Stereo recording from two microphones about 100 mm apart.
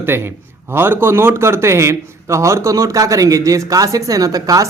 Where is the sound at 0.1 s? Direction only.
25° right (ahead or behind).